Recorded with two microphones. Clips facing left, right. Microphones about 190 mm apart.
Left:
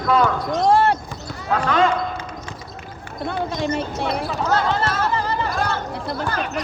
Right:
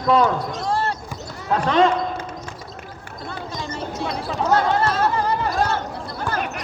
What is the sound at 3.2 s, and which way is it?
Speech, 60° left (ahead or behind).